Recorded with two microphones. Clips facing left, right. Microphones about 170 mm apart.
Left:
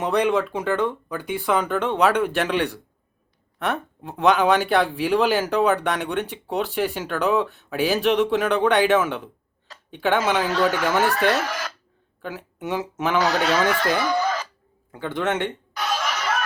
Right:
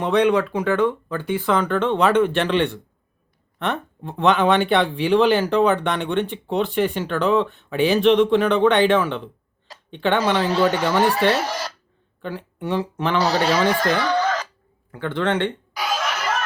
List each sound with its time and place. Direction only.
0.0 s speech: 5° left (ahead or behind)
11.4 s speech: 35° right (ahead or behind)
12.2 s speech: 5° left (ahead or behind)
13.1 s speech: 35° right (ahead or behind)
13.8 s a sound: 10° left (ahead or behind)
14.9 s speech: 15° left (ahead or behind)
15.7 s chuckle: 5° right (ahead or behind)